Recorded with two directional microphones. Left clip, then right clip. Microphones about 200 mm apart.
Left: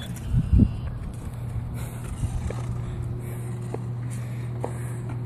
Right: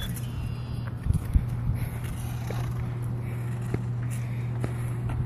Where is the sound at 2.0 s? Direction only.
Centre (ahead or behind).